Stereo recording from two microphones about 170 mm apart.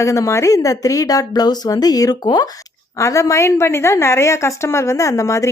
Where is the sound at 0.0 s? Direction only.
15° left (ahead or behind).